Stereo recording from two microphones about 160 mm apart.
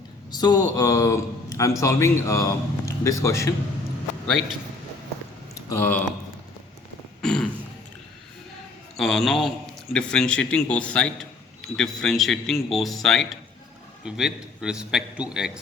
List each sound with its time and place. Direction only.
0.3 s a man's voice: 25° left (ahead or behind)
5.5 s speech: 20° left (ahead or behind)
7.2 s throat clearing: 5° left (ahead or behind)
9.0 s a man's voice: centre (ahead or behind)